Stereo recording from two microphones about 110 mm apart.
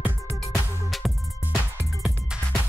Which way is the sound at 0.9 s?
Centre (ahead or behind).